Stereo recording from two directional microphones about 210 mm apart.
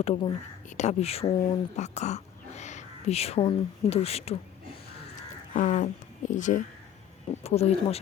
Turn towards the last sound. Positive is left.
turn(degrees=30)  # may be behind; listen again after turning